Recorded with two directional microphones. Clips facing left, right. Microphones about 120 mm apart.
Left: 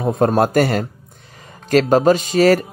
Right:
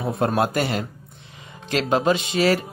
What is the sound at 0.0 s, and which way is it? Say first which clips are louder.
Speech: left 6 dB; 40° left (ahead or behind).